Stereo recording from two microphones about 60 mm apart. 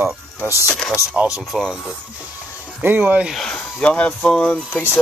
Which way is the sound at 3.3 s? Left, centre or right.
Centre.